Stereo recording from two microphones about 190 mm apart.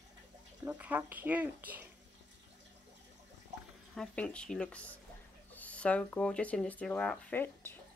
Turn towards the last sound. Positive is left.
turn(degrees=10)  # may be behind; listen again after turning